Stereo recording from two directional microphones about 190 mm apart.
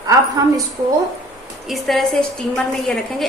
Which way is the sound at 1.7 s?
Centre (ahead or behind).